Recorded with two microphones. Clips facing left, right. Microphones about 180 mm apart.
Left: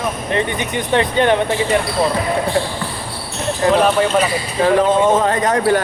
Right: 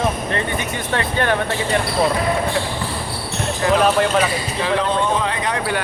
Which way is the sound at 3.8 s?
5° left (ahead or behind).